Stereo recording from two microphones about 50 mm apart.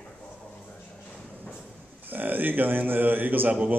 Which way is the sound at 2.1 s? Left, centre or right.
Right.